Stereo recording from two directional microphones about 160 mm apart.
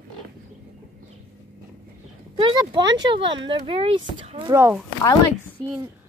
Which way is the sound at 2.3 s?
30° right (ahead or behind).